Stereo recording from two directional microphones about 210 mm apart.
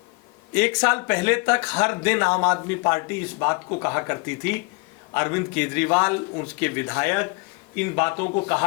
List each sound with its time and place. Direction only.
0.5 s speech: 5° left (ahead or behind)
8.1 s speech: 25° left (ahead or behind)